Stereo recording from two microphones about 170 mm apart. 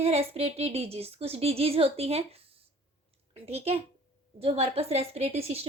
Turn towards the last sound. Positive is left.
turn(degrees=-35)  # may be behind; listen again after turning